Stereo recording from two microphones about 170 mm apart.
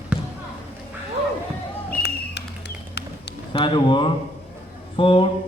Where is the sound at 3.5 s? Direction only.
30° left (ahead or behind).